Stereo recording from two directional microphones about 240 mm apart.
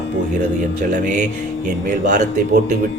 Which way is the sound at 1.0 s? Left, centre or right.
Right.